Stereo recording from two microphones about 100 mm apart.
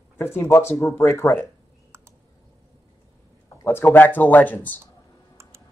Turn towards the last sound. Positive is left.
turn(degrees=15)  # may be behind; listen again after turning